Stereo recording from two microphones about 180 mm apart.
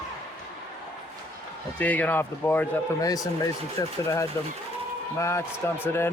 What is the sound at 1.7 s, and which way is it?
A man's voice, 10° left (ahead or behind).